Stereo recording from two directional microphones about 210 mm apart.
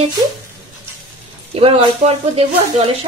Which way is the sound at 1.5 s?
30° right (ahead or behind).